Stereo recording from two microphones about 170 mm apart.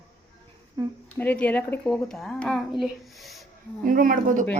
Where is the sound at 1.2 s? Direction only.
10° left (ahead or behind).